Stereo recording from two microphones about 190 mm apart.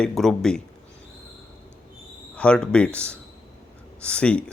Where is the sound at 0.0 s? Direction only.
Centre (ahead or behind).